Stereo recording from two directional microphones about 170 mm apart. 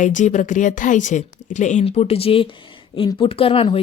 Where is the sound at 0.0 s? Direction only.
45° left (ahead or behind).